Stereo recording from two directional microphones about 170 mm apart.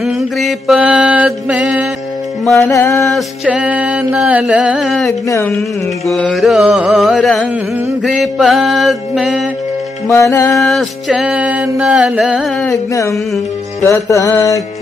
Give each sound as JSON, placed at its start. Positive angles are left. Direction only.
{"t": 0.0, "sound": "mantra", "side_deg": 0}
{"t": 2.4, "sound": "music", "side_deg": 0}
{"t": 2.9, "sound": "mantra", "side_deg": 0}
{"t": 5.2, "sound": "a sound", "side_deg": 15}
{"t": 6.0, "sound": "mantra", "side_deg": 0}
{"t": 10.3, "sound": "a sound", "side_deg": 15}
{"t": 10.6, "sound": "mantra", "side_deg": 0}
{"t": 13.1, "sound": "music", "side_deg": 0}
{"t": 13.8, "sound": "music", "side_deg": 20}